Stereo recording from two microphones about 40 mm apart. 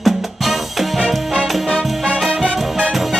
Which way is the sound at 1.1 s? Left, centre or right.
Centre.